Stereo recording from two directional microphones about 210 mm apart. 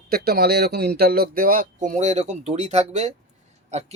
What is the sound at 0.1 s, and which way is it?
Speech, 45° right (ahead or behind).